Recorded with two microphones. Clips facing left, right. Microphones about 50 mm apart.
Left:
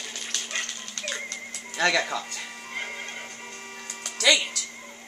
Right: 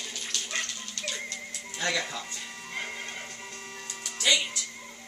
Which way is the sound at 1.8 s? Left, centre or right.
Left.